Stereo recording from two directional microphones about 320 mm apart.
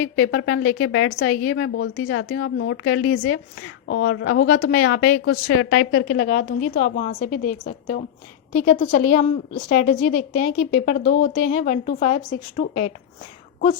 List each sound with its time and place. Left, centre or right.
0.2 s a woman's voice: left
6.2 s a woman's voice: left